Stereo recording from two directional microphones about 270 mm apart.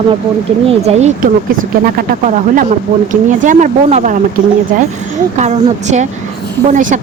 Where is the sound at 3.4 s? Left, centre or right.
Right.